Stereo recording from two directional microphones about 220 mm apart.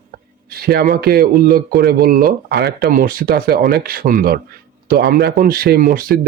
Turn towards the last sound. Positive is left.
turn(degrees=-40)  # may be behind; listen again after turning